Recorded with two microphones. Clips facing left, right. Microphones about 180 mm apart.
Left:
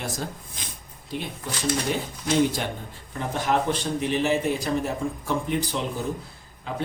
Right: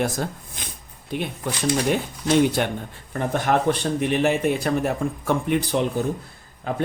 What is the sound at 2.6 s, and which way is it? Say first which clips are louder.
Speech: right 6 dB; 60° right (ahead or behind).